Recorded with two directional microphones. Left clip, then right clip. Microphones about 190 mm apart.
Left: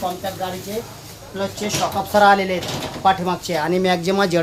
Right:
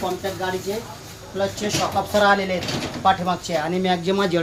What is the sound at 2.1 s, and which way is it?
Speech, 35° left (ahead or behind).